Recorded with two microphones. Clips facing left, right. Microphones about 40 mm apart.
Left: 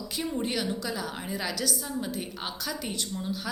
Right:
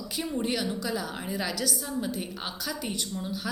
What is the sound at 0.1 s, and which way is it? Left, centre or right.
A woman's voice, centre.